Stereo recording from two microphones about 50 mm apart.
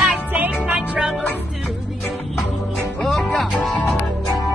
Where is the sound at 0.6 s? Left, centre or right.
Right.